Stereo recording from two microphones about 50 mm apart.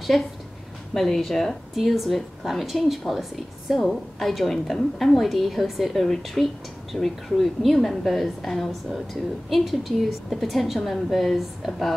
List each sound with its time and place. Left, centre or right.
0.1 s speech: centre